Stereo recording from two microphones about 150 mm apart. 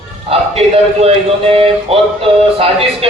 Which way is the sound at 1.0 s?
40° right (ahead or behind).